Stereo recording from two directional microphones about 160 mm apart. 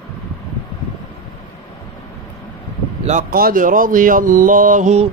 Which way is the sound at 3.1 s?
60° right (ahead or behind).